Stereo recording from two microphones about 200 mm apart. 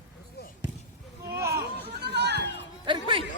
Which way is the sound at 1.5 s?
55° right (ahead or behind).